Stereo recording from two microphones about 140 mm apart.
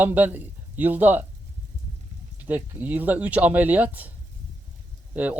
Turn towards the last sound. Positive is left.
turn(degrees=-10)  # may be behind; listen again after turning